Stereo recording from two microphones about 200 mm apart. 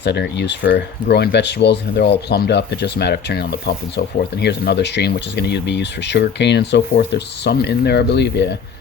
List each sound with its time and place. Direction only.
0.0 s speech: 55° left (ahead or behind)